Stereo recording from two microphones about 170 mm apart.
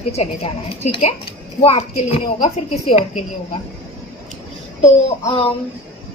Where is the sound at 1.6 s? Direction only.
35° left (ahead or behind).